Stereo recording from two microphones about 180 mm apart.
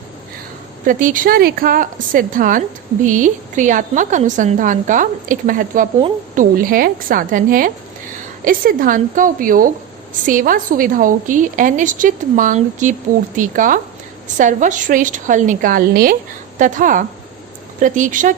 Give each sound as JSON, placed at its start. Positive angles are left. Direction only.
{"t": 0.9, "sound": "a woman's voice", "side_deg": -45}